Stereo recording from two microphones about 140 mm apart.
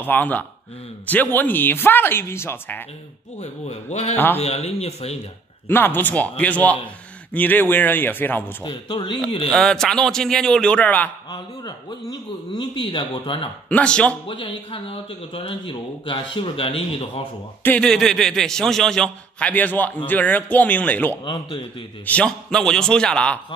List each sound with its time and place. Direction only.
0.0 s speech: 10° left (ahead or behind)
3.3 s a man's voice: 50° left (ahead or behind)
5.7 s speech: 15° left (ahead or behind)
8.6 s speech: 35° left (ahead or behind)
9.5 s a man's voice: 5° left (ahead or behind)
11.3 s speech: 30° left (ahead or behind)
13.7 s speech: 10° left (ahead or behind)
14.2 s speech: 40° left (ahead or behind)
17.6 s a man's voice: 5° left (ahead or behind)
21.3 s speech: 35° left (ahead or behind)
22.0 s a man's voice: 10° left (ahead or behind)